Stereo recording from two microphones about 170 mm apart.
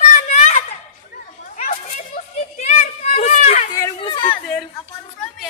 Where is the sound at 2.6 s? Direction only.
45° left (ahead or behind).